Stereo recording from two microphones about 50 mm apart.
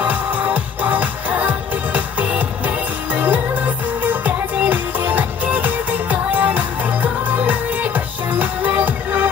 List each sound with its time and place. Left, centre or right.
0.0 s music: right